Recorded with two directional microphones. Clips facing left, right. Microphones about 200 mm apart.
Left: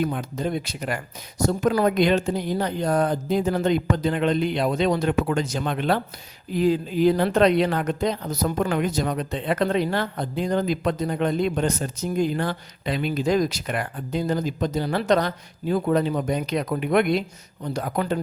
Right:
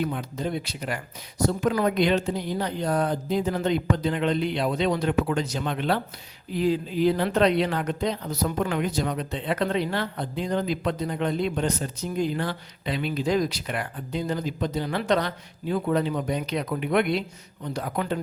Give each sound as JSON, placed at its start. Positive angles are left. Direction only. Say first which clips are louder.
{"t": 0.0, "sound": "speech", "louder": "left 3 dB", "side_deg": 50}